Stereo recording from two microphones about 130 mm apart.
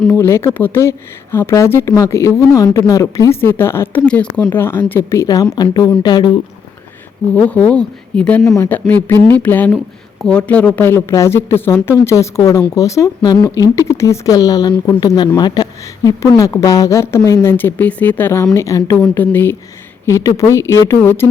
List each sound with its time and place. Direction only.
0.1 s a woman's voice: 20° left (ahead or behind)
7.3 s speech: 10° left (ahead or behind)
8.4 s a woman's voice: 25° left (ahead or behind)